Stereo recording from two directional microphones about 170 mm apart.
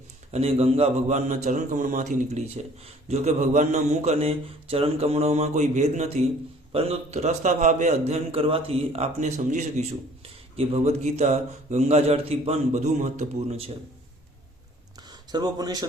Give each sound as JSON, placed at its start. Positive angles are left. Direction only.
{"t": 0.3, "sound": "a man's voice", "side_deg": -40}
{"t": 10.2, "sound": "speech", "side_deg": -35}
{"t": 15.1, "sound": "speech", "side_deg": -25}